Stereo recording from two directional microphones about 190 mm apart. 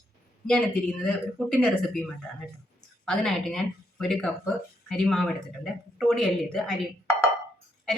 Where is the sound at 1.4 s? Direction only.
Centre (ahead or behind).